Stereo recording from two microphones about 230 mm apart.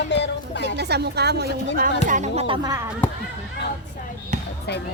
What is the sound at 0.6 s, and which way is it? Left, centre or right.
Speech, right.